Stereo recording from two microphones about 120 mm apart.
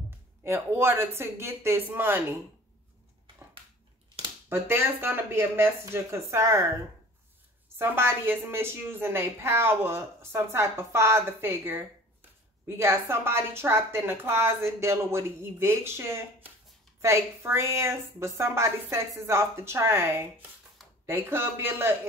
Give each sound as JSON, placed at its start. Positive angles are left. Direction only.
{"t": 0.4, "sound": "a woman's voice", "side_deg": -20}
{"t": 4.5, "sound": "a woman's voice", "side_deg": -20}
{"t": 7.8, "sound": "a woman's voice", "side_deg": -20}